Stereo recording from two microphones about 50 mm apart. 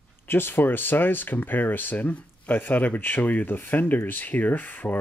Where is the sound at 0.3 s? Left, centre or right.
Left.